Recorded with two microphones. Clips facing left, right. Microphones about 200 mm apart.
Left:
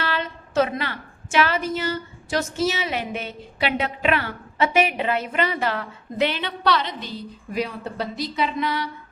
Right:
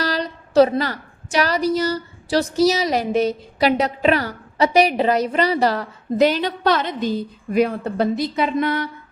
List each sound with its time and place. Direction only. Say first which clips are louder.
0.0 s a woman's voice: right 4 dB; 40° right (ahead or behind)